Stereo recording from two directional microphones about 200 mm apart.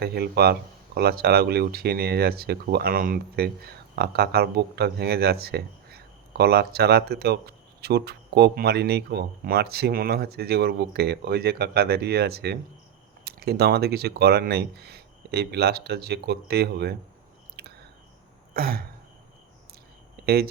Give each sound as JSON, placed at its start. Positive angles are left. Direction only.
{"t": 0.0, "sound": "speech", "side_deg": -50}
{"t": 17.6, "sound": "chewing", "side_deg": -55}
{"t": 18.5, "sound": "throat clearing", "side_deg": -50}
{"t": 20.2, "sound": "speech", "side_deg": -50}